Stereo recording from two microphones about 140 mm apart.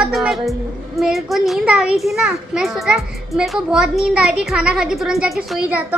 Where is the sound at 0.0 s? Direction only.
Centre (ahead or behind).